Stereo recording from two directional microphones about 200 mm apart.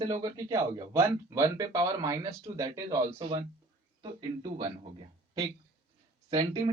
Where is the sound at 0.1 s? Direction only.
20° right (ahead or behind).